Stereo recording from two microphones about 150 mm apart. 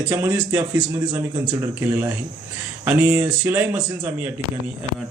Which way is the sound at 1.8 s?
15° right (ahead or behind).